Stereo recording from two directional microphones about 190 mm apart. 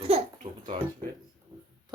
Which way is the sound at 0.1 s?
30° right (ahead or behind).